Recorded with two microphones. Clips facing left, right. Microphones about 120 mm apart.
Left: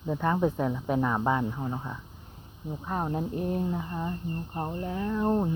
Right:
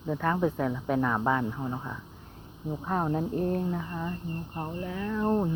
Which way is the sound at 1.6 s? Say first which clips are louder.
Even; 5° left (ahead or behind).